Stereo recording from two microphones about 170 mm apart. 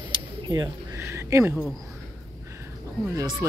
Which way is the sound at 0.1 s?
25° right (ahead or behind).